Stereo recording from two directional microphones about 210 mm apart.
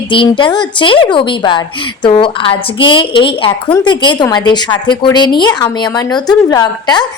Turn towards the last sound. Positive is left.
turn(degrees=20)  # may be behind; listen again after turning